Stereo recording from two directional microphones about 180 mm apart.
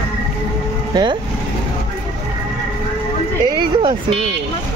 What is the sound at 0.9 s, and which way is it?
Speech, 25° right (ahead or behind).